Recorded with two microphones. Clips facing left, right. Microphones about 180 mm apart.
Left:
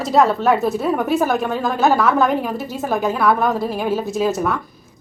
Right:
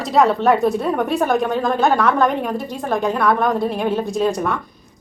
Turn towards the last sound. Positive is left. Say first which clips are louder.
# even
turn(degrees=5)  # may be behind; listen again after turning